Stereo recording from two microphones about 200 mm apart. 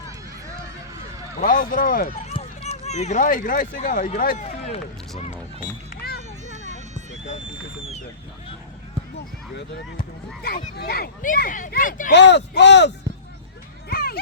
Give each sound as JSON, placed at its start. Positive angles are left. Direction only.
{"t": 1.4, "sound": "speech", "side_deg": 45}
{"t": 2.3, "sound": "speech", "side_deg": 30}
{"t": 6.0, "sound": "children playing", "side_deg": 50}
{"t": 6.5, "sound": "run", "side_deg": -35}
{"t": 9.6, "sound": "speech", "side_deg": 50}
{"t": 12.1, "sound": "speech", "side_deg": 60}
{"t": 13.8, "sound": "a sound", "side_deg": 50}